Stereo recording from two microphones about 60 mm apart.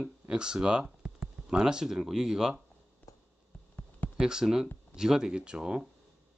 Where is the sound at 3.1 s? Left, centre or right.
Left.